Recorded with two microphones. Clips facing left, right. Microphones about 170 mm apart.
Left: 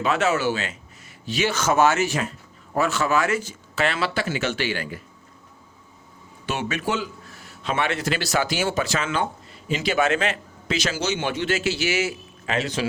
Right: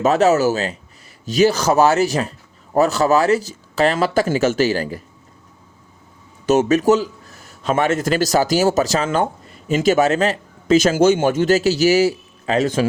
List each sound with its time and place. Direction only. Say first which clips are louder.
0.0 s speech: right 7 dB; 40° right (ahead or behind)
6.4 s speech: right 12 dB; 40° right (ahead or behind)